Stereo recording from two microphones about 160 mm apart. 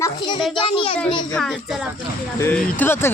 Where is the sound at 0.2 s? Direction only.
30° left (ahead or behind).